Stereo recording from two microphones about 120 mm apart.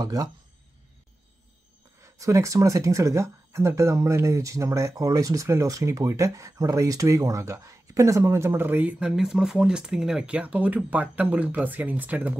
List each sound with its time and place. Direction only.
0.0 s speech: 35° right (ahead or behind)
2.0 s speech: 25° right (ahead or behind)